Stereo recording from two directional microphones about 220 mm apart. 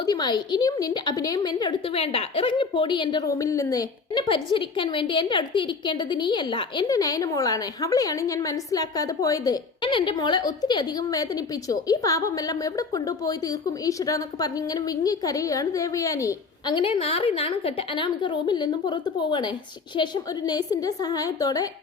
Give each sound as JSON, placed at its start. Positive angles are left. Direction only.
{"t": 0.0, "sound": "a woman's voice", "side_deg": 20}